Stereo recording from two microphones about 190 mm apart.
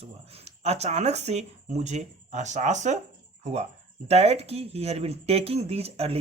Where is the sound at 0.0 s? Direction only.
30° right (ahead or behind).